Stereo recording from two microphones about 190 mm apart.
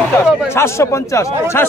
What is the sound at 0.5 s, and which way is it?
Speech, 15° left (ahead or behind).